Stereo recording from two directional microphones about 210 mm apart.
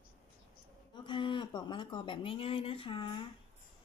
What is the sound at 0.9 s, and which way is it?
Speech, 20° left (ahead or behind).